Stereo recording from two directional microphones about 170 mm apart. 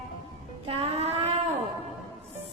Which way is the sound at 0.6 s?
35° right (ahead or behind).